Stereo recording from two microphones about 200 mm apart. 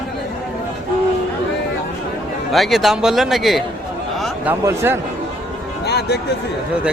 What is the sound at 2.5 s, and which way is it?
A man's voice, centre (ahead or behind).